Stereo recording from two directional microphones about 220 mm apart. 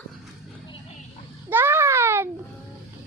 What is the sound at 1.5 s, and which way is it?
Babbling, 10° right (ahead or behind).